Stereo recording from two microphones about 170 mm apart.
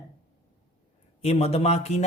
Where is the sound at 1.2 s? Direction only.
35° left (ahead or behind).